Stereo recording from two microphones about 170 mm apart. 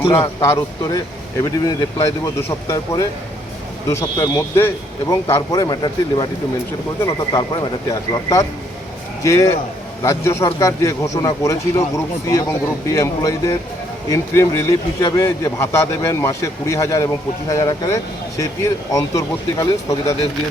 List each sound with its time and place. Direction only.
0.0 s speech: 35° left (ahead or behind)
0.3 s speech: 20° left (ahead or behind)
2.0 s speech: 15° left (ahead or behind)